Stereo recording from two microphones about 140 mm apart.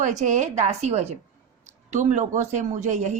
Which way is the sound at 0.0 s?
60° right (ahead or behind).